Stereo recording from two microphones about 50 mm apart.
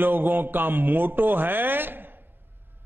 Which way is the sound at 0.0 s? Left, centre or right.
Right.